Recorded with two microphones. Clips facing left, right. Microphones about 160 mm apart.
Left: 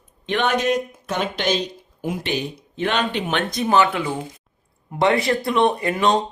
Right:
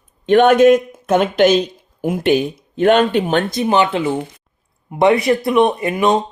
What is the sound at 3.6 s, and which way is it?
Speech, 20° right (ahead or behind).